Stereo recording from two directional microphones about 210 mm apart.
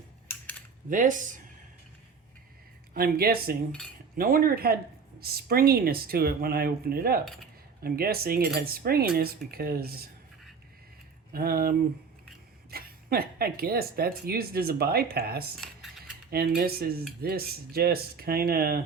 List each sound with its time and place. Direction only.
0.9 s speech: 40° right (ahead or behind)
2.9 s speech: 45° right (ahead or behind)
11.3 s speech: 45° right (ahead or behind)
12.7 s speech: 45° right (ahead or behind)
15.5 s cutlery: centre (ahead or behind)
16.3 s speech: 45° right (ahead or behind)